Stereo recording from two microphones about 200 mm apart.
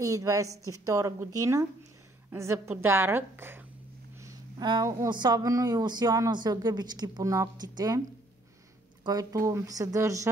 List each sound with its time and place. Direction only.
0.0 s a woman's voice: 15° right (ahead or behind)
9.0 s a woman's voice: 15° right (ahead or behind)